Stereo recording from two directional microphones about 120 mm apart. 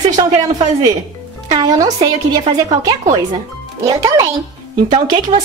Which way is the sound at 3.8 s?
30° right (ahead or behind).